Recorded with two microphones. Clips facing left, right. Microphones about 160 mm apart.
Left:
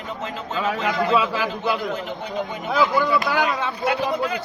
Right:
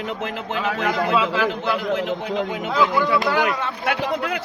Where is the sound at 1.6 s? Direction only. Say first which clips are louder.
Even; centre (ahead or behind).